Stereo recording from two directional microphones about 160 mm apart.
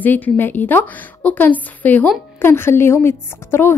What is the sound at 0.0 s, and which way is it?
A woman's voice, 10° left (ahead or behind).